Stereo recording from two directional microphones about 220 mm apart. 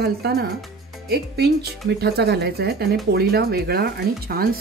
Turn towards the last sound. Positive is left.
turn(degrees=-45)  # may be behind; listen again after turning